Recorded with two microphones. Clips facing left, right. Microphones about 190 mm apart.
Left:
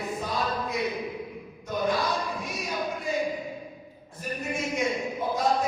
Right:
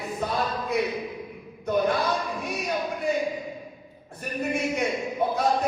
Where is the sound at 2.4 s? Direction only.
60° right (ahead or behind).